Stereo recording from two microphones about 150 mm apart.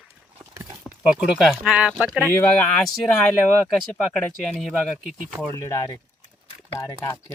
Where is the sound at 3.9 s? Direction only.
5° left (ahead or behind).